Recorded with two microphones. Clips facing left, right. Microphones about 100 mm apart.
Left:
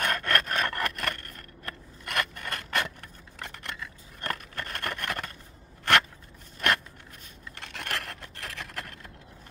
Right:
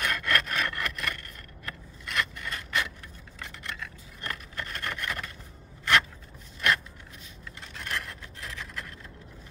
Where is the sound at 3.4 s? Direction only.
55° left (ahead or behind).